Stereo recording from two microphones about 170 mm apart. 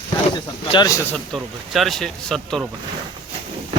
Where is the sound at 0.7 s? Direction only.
20° left (ahead or behind).